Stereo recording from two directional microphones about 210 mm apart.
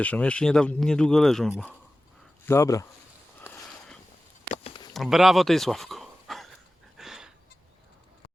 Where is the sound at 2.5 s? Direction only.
15° left (ahead or behind).